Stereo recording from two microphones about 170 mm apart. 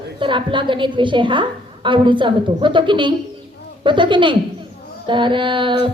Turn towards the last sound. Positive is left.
turn(degrees=-30)  # may be behind; listen again after turning